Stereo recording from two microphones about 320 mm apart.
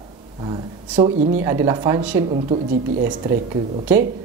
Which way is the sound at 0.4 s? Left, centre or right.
Centre.